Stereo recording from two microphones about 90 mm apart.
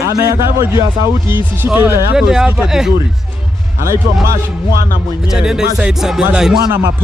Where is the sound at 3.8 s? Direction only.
35° right (ahead or behind).